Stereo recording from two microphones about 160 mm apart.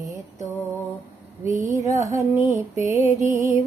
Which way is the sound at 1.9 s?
20° right (ahead or behind).